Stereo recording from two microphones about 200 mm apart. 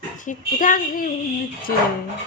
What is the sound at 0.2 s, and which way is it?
Speech, 40° left (ahead or behind).